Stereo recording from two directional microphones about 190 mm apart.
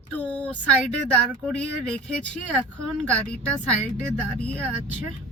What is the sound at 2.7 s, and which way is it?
A woman's voice, 5° left (ahead or behind).